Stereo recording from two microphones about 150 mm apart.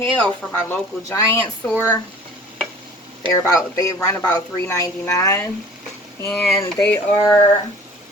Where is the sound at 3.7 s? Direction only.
20° left (ahead or behind).